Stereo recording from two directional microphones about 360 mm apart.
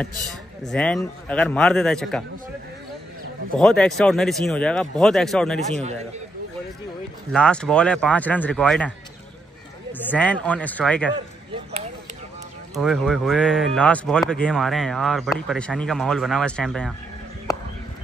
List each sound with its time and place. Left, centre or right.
0.3 s speech: centre
3.5 s speech: centre
5.7 s a man's voice: centre
7.3 s speech: centre
9.9 s speech: centre
12.7 s speech: centre